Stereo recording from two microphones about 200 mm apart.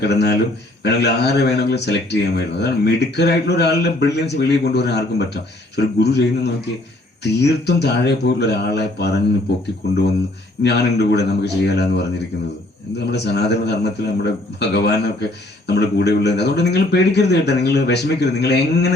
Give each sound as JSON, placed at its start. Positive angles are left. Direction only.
{"t": 0.0, "sound": "speech", "side_deg": 55}
{"t": 10.6, "sound": "speech", "side_deg": 55}
{"t": 13.1, "sound": "speech", "side_deg": 55}